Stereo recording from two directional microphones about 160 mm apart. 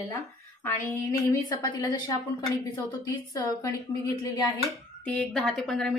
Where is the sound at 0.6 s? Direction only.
10° left (ahead or behind).